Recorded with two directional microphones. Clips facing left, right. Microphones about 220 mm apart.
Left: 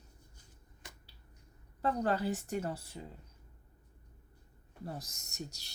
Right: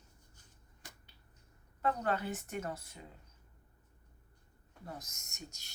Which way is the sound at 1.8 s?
30° left (ahead or behind).